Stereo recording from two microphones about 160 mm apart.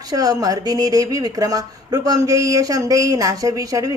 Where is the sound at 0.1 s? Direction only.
25° right (ahead or behind).